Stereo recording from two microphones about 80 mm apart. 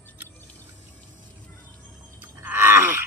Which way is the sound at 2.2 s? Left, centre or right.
Right.